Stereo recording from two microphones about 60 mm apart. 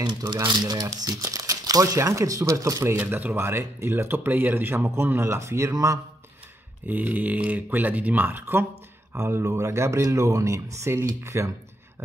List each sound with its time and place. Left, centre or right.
0.7 s speech: right
2.0 s speech: right
3.1 s a man's voice: right
6.9 s speech: right
9.1 s a man's voice: right